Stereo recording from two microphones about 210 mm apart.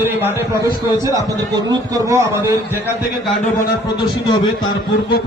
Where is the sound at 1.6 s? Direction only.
20° right (ahead or behind).